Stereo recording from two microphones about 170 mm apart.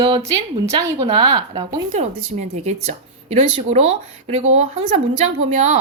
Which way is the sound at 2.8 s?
40° right (ahead or behind).